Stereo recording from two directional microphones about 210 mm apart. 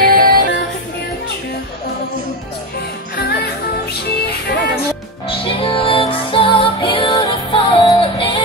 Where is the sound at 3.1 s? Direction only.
45° left (ahead or behind).